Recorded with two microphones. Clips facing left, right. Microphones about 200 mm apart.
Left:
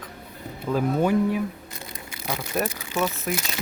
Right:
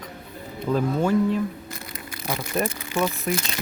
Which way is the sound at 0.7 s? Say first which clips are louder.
Even; 15° left (ahead or behind).